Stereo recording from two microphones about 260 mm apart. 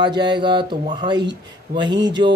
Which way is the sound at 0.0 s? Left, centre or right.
Centre.